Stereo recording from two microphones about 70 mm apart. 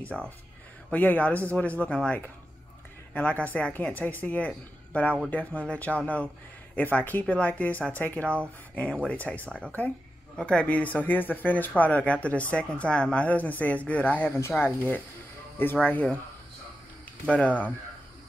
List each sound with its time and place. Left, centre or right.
0.1 s speech: centre
0.9 s speech: left
3.1 s speech: centre
17.3 s speech: centre